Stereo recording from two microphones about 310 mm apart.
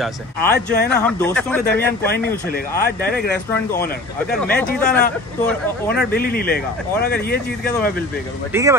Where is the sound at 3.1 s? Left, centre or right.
Centre.